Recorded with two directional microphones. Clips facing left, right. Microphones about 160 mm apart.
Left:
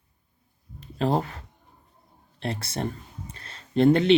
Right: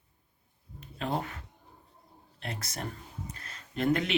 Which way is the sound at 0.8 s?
35° left (ahead or behind).